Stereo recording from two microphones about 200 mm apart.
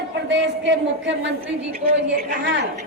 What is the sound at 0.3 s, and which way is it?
A woman's voice, 65° right (ahead or behind).